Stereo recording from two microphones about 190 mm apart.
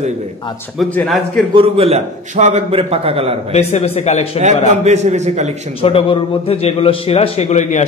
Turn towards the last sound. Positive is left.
turn(degrees=35)  # may be behind; listen again after turning